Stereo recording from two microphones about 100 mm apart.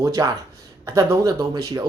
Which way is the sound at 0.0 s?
40° right (ahead or behind).